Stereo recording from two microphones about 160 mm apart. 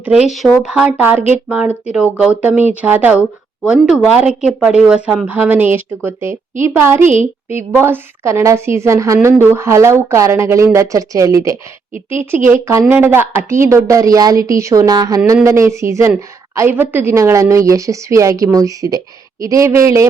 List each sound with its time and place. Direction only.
0.0 s a woman's voice: 5° right (ahead or behind)
12.9 s a woman's voice: 15° right (ahead or behind)